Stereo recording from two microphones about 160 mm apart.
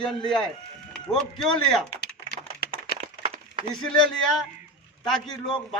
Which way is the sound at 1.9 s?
90° left.